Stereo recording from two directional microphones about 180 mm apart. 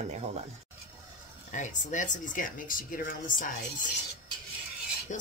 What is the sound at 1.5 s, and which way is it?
Speech, 45° left (ahead or behind).